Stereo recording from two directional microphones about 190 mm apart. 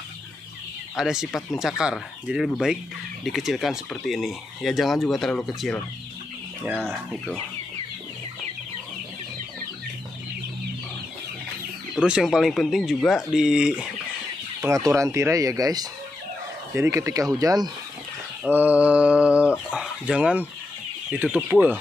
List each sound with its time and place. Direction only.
0.9 s speech: 5° right (ahead or behind)
6.8 s speech: 5° left (ahead or behind)
11.9 s speech: 5° right (ahead or behind)
14.6 s speech: 15° right (ahead or behind)